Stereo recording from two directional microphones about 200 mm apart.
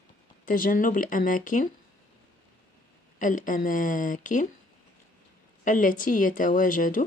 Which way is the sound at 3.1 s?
40° left (ahead or behind).